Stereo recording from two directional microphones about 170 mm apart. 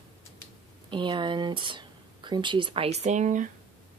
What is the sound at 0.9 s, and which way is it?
Speech, 30° right (ahead or behind).